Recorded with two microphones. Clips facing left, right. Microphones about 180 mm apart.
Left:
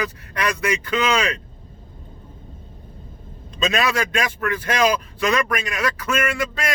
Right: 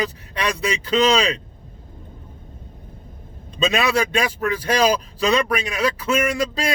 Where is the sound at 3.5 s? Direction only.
35° right (ahead or behind).